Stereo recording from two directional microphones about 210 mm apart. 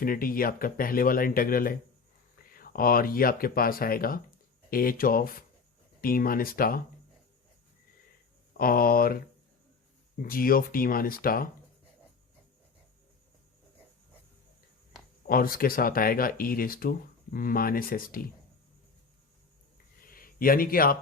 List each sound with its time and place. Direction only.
0.0 s speech: 45° left (ahead or behind)
8.5 s speech: 45° left (ahead or behind)
15.3 s speech: 45° left (ahead or behind)
20.1 s a man's voice: 45° left (ahead or behind)